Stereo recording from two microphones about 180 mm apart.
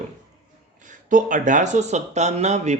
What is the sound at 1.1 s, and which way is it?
Speech, 45° right (ahead or behind).